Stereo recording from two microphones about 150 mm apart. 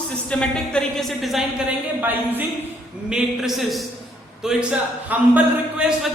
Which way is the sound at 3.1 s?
5° right (ahead or behind).